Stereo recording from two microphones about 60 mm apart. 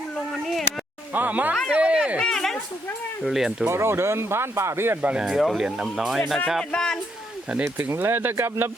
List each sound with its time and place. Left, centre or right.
1.1 s speech: right
1.7 s a sound: centre
2.1 s speech: centre
3.7 s speech: right
5.0 s speech: centre
5.4 s speech: centre
6.7 s speech: centre
7.8 s speech: right